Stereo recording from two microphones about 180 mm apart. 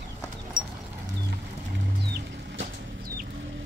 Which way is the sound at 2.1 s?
60° right (ahead or behind).